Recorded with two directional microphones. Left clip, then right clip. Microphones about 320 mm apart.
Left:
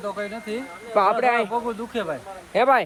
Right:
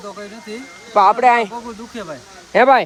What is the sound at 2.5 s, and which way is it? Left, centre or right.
Speech, right.